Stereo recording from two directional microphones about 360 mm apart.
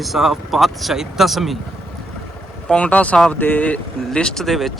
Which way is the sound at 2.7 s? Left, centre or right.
Centre.